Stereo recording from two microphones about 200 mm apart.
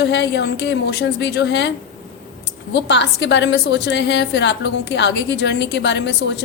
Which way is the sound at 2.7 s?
60° left (ahead or behind).